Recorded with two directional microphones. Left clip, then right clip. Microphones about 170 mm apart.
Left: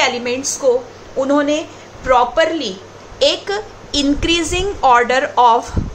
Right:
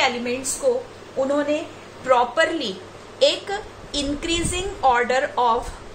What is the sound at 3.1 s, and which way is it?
A woman's voice, 30° left (ahead or behind).